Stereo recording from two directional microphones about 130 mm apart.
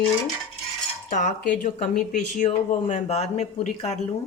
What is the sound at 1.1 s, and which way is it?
Speech, 80° left.